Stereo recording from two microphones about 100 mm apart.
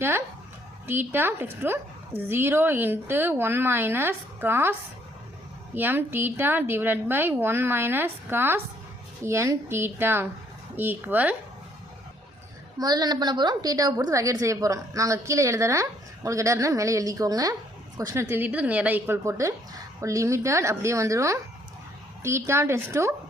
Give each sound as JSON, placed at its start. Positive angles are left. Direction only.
{"t": 0.9, "sound": "a woman's voice", "side_deg": -20}
{"t": 5.7, "sound": "a woman's voice", "side_deg": -20}
{"t": 12.8, "sound": "a woman's voice", "side_deg": -40}
{"t": 18.1, "sound": "a woman's voice", "side_deg": -25}